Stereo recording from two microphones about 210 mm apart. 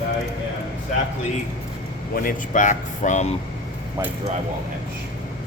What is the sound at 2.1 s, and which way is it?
Speech, 40° left (ahead or behind).